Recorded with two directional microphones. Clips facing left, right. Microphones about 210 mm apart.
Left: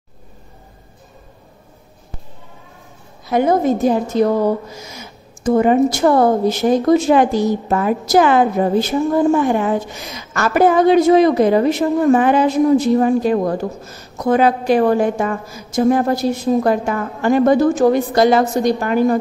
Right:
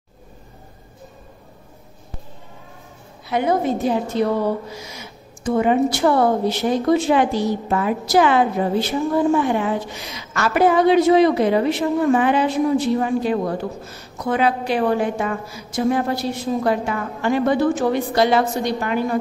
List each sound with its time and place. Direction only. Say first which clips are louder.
3.3 s a woman's voice: left 5 dB; 45° left (ahead or behind)